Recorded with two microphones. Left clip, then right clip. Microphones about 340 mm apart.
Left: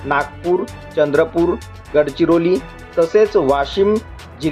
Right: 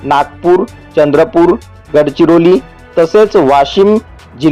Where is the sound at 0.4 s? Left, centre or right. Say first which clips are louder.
Right 10 dB; centre.